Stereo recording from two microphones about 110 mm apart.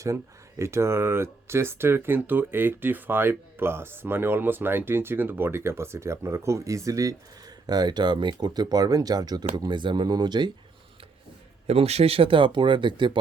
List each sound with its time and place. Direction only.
0.6 s speech: 25° right (ahead or behind); by 10.5 s 40° right (ahead or behind)
11.6 s speech: 70° right (ahead or behind); by 13.1 s 45° right (ahead or behind)